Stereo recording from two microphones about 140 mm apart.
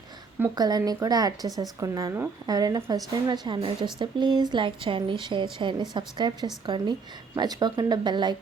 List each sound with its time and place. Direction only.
0.5 s a woman's voice: 25° right (ahead or behind)